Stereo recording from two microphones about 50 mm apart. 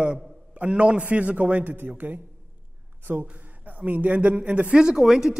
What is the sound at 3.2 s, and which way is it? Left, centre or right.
A woman's voice, right.